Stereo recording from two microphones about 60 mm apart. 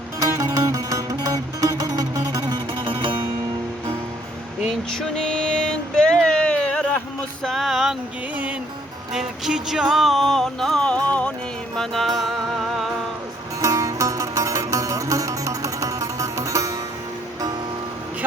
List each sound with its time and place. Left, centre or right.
0.3 s music: right
0.5 s music: right
4.9 s music: centre
7.4 s a sound: centre
9.1 s music: centre
10.8 s music: centre
11.8 s music: centre
13.6 s music: right